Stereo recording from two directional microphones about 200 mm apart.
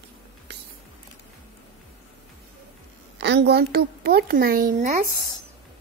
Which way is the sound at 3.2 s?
60° right (ahead or behind).